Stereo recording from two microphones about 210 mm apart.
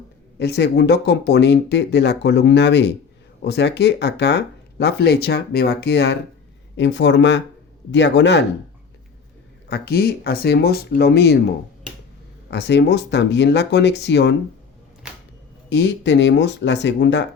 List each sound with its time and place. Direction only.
0.3 s speech: 55° left (ahead or behind)
9.6 s speech: 50° left (ahead or behind)
12.5 s speech: 55° left (ahead or behind)
15.7 s speech: 50° left (ahead or behind)